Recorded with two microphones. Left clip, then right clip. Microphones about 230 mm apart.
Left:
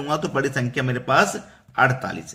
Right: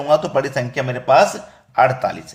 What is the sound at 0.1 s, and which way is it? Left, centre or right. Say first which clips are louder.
Speech: right 7 dB; centre.